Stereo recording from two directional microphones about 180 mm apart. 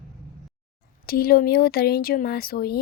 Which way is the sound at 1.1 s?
55° left (ahead or behind).